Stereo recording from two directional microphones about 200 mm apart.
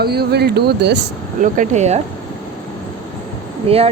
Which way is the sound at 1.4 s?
40° right (ahead or behind).